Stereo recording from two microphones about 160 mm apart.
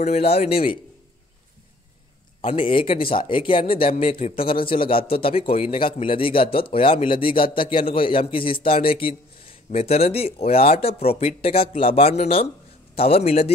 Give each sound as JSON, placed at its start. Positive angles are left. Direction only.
{"t": 0.0, "sound": "a man's voice", "side_deg": 40}
{"t": 2.4, "sound": "a man's voice", "side_deg": 35}